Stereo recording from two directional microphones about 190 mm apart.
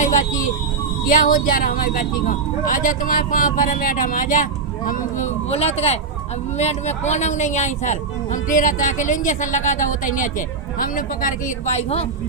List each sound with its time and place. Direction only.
1.0 s speech: 45° left (ahead or behind)